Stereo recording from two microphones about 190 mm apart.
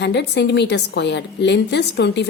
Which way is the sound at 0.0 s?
65° left (ahead or behind).